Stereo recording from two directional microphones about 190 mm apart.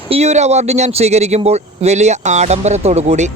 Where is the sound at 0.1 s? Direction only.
35° right (ahead or behind).